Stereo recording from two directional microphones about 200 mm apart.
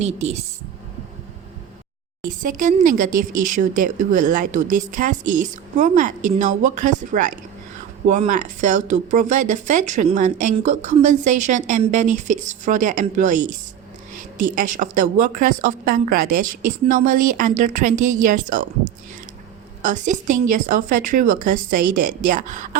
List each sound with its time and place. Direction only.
0.0 s speech: 35° right (ahead or behind)
2.2 s a woman's voice: 40° right (ahead or behind)
19.8 s speech: 40° right (ahead or behind)